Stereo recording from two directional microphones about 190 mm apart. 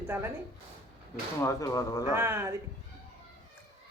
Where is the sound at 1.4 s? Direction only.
15° left (ahead or behind).